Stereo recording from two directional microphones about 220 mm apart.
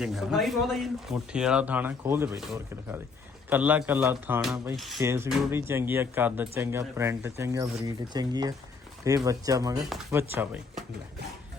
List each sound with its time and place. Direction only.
0.0 s speech: centre (ahead or behind)